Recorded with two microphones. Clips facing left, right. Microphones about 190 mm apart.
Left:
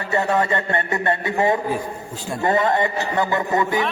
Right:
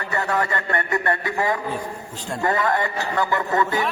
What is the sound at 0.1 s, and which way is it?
A man's voice, 25° left (ahead or behind).